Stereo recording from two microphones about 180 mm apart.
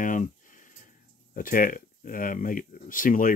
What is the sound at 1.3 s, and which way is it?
Speech, 50° left (ahead or behind).